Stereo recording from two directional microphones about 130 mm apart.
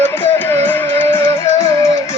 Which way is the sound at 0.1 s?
15° left (ahead or behind).